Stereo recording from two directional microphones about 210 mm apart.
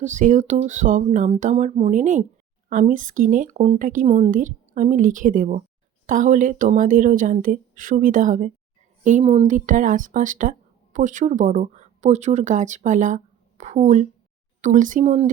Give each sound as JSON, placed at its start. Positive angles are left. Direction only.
{"t": 0.0, "sound": "speech", "side_deg": -35}